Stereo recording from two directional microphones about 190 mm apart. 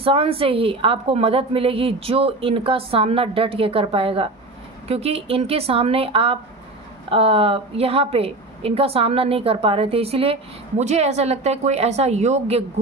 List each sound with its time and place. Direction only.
0.0 s a woman's voice: 30° right (ahead or behind)